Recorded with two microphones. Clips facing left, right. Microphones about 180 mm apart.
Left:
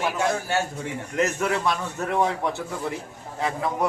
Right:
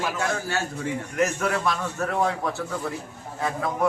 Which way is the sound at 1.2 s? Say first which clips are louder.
Left 1 dB; 20° left (ahead or behind).